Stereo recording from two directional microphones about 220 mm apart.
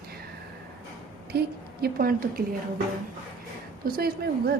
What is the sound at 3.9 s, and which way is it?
Speech, 40° right (ahead or behind).